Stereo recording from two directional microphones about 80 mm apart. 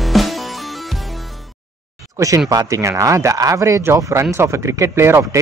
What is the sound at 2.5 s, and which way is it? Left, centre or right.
Speech, right.